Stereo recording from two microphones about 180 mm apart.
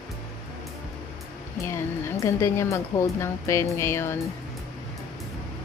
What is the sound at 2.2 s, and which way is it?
Speech, 15° left (ahead or behind).